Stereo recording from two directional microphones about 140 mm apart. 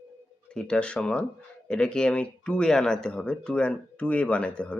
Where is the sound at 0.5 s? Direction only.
5° left (ahead or behind).